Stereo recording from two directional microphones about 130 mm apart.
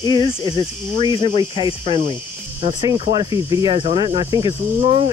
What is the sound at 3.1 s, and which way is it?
Speech, 30° right (ahead or behind).